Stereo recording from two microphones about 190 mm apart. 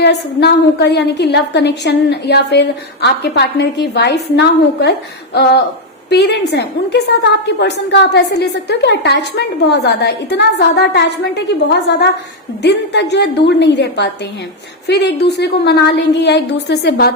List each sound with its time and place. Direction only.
0.0 s a woman's voice: 65° left (ahead or behind)
12.6 s a woman's voice: 65° left (ahead or behind)